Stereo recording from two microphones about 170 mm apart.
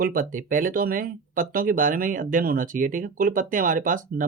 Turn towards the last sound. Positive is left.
turn(degrees=-50)  # may be behind; listen again after turning